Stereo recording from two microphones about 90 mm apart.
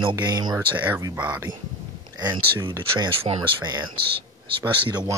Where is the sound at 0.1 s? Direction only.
50° right (ahead or behind).